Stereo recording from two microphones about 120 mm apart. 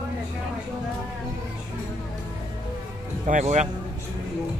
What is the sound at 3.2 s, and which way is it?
Speech, 80° right.